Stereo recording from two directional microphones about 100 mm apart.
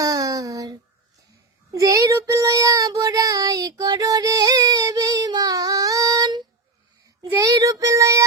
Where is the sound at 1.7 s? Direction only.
35° right (ahead or behind).